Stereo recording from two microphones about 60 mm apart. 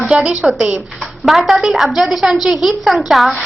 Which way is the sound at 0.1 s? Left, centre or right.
Centre.